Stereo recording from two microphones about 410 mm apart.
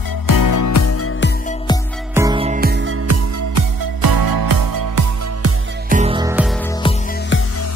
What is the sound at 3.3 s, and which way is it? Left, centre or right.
Music, right.